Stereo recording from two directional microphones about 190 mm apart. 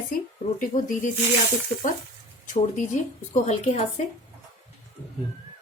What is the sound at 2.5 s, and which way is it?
A woman's voice, 40° left (ahead or behind).